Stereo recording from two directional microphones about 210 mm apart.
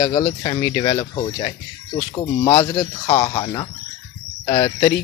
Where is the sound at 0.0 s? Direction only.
20° left (ahead or behind).